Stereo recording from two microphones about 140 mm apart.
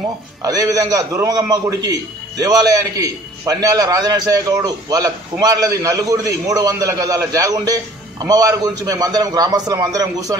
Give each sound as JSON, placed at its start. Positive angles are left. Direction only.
{"t": 0.4, "sound": "a man's voice", "side_deg": -25}